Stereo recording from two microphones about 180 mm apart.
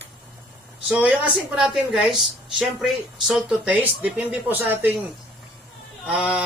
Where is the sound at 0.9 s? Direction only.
5° right (ahead or behind).